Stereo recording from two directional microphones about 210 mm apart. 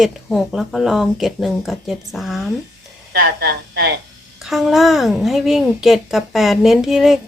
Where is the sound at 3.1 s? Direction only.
50° right (ahead or behind).